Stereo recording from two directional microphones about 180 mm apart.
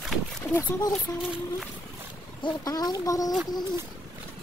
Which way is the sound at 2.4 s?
20° left (ahead or behind).